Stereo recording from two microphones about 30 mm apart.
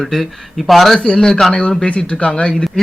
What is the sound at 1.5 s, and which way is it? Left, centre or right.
Speech, left.